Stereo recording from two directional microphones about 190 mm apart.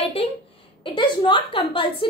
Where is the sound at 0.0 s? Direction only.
30° left (ahead or behind).